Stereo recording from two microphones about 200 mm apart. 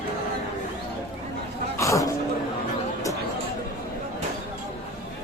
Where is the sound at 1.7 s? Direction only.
15° left (ahead or behind).